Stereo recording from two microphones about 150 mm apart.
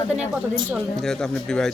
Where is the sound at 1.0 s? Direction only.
5° left (ahead or behind).